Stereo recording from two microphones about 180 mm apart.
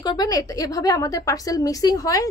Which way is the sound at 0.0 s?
20° left (ahead or behind).